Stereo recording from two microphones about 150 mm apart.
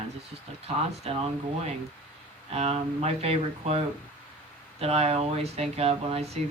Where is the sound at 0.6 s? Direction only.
40° right (ahead or behind).